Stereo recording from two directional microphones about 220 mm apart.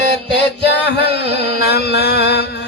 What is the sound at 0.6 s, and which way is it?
Music, 50° left (ahead or behind).